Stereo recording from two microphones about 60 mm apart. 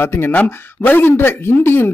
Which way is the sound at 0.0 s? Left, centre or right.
Left.